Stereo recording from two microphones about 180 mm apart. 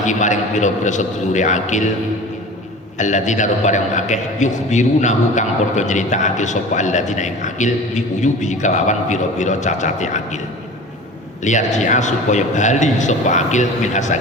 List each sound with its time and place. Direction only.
0.0 s a man's voice: 45° left (ahead or behind)
3.0 s a man's voice: 40° left (ahead or behind)
11.4 s a man's voice: 40° left (ahead or behind)